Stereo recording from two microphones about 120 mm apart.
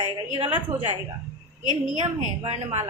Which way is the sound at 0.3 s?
55° right (ahead or behind).